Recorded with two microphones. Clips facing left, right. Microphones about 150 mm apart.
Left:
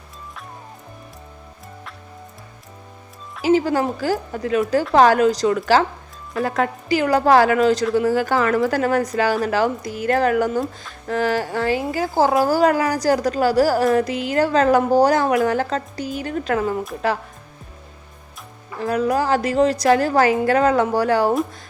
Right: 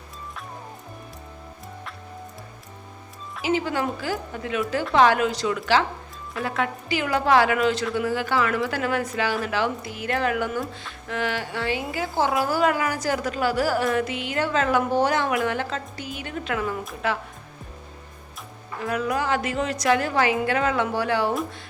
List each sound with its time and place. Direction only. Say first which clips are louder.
3.4 s a woman's voice: left 7 dB; 40° left (ahead or behind)
18.8 s a woman's voice: left 6 dB; 35° left (ahead or behind)